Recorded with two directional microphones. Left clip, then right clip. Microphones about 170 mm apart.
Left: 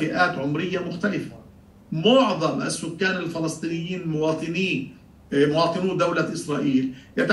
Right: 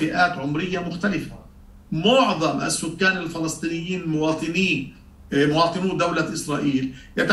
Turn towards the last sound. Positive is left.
turn(degrees=-30)  # may be behind; listen again after turning